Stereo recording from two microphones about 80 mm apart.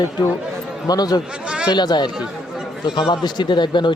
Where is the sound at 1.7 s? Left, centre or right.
Left.